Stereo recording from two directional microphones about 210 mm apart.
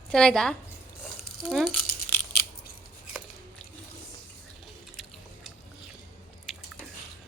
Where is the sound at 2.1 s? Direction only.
10° left (ahead or behind).